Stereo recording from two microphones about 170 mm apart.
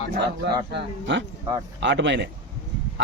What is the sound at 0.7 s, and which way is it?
A man's voice, 90° right.